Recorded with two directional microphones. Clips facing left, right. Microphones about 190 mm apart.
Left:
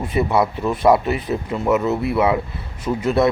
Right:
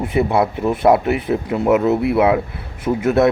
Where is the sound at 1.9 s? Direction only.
20° right (ahead or behind).